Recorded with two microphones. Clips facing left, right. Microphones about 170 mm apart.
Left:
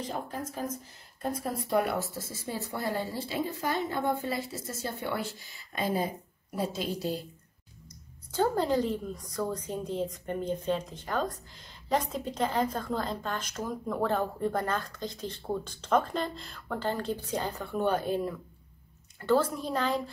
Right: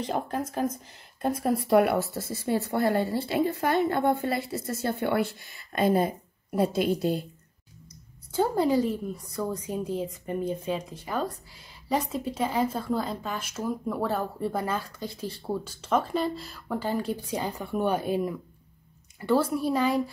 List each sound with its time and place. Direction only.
0.0 s speech: 70° right (ahead or behind)
8.3 s a woman's voice: 10° right (ahead or behind)